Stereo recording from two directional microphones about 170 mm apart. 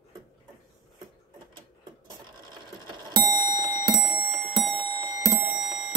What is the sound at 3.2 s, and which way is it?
Bicycle bell, 20° right (ahead or behind).